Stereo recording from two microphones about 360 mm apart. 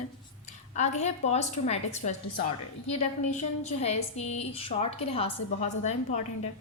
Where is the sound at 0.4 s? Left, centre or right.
Centre.